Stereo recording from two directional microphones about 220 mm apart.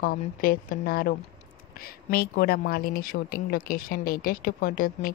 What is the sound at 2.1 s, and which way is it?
Speech, 45° left (ahead or behind).